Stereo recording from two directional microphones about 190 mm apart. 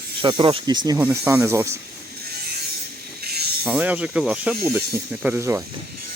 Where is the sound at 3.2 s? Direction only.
55° right (ahead or behind).